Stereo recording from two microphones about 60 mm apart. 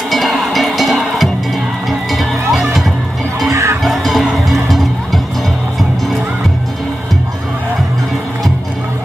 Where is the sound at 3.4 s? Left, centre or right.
Right.